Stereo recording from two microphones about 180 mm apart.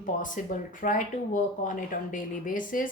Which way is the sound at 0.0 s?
45° left (ahead or behind).